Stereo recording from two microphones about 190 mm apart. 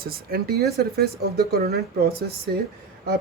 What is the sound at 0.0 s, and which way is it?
Speech, 55° right (ahead or behind).